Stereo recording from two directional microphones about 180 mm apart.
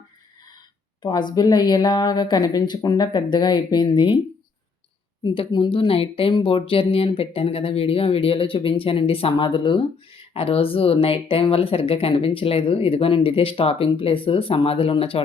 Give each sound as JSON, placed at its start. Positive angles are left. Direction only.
{"t": 1.0, "sound": "a woman's voice", "side_deg": 25}
{"t": 5.2, "sound": "a woman's voice", "side_deg": 25}